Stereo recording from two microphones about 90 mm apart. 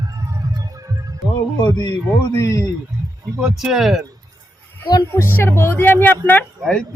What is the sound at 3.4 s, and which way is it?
Speech, 5° right (ahead or behind).